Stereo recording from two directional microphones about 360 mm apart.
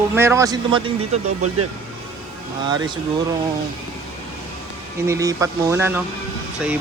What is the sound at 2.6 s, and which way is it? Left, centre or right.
Speech, centre.